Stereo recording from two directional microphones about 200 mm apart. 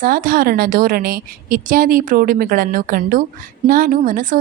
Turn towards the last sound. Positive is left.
turn(degrees=-40)  # may be behind; listen again after turning